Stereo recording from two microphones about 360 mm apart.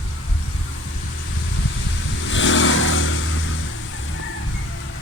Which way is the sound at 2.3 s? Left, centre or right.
Left.